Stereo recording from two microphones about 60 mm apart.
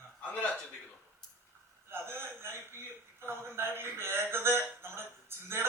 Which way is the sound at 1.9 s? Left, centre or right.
Right.